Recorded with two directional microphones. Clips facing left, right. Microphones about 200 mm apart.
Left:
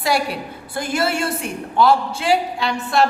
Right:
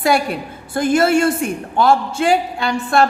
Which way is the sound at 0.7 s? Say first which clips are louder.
Right 7 dB; 50° right (ahead or behind).